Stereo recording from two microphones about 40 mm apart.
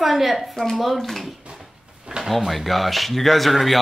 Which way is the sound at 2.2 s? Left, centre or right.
Centre.